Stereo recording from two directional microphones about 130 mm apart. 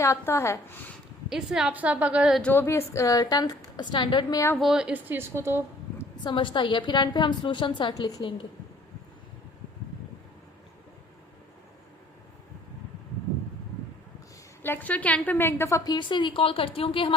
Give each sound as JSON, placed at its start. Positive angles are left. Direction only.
{"t": 0.0, "sound": "a woman's voice", "side_deg": 20}
{"t": 1.3, "sound": "a woman's voice", "side_deg": -5}
{"t": 2.4, "sound": "a woman's voice", "side_deg": 15}
{"t": 4.5, "sound": "a woman's voice", "side_deg": -5}
{"t": 6.2, "sound": "a woman's voice", "side_deg": 40}
{"t": 14.6, "sound": "a woman's voice", "side_deg": 15}